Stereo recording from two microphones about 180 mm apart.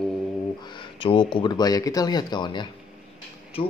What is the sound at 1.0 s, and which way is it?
Speech, 25° left (ahead or behind).